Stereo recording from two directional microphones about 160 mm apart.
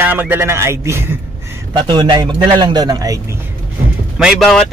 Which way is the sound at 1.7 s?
30° right (ahead or behind).